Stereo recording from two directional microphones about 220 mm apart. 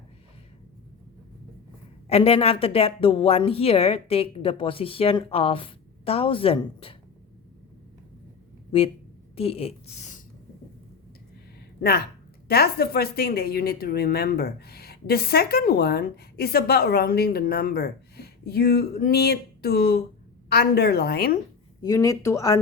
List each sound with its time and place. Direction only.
2.0 s a woman's voice: 25° left (ahead or behind)
9.3 s a woman's voice: 25° left (ahead or behind)
11.8 s speech: 45° left (ahead or behind)
21.8 s speech: 15° left (ahead or behind)